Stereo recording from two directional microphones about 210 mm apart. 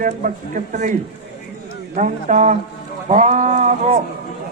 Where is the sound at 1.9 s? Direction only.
35° right (ahead or behind).